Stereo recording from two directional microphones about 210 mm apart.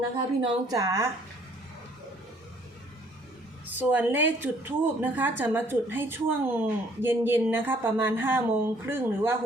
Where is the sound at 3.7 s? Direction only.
10° right (ahead or behind).